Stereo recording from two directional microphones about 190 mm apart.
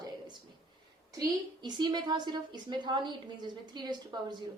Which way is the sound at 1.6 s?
20° right (ahead or behind).